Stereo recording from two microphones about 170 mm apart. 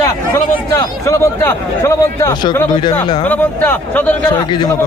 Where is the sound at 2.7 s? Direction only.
25° left (ahead or behind).